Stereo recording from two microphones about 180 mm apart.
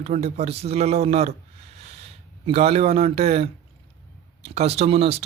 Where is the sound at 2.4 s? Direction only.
35° right (ahead or behind).